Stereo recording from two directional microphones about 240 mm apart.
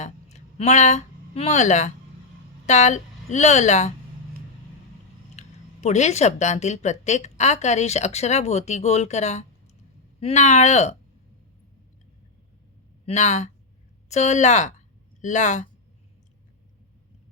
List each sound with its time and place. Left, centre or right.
0.0 s a sound: left
2.6 s a woman's voice: left
5.4 s speech: left
13.1 s speech: left